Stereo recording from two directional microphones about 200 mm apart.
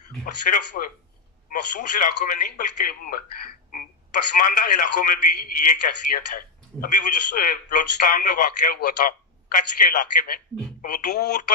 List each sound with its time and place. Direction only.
0.2 s speech: 45° left (ahead or behind)